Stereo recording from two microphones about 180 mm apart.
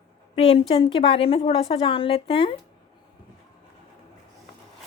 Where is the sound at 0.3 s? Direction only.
30° left (ahead or behind).